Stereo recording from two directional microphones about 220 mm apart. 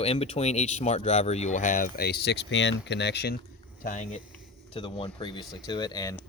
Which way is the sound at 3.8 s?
35° left (ahead or behind).